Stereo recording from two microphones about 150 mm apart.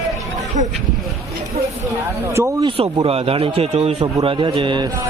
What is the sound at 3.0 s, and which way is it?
Speech, 40° right (ahead or behind).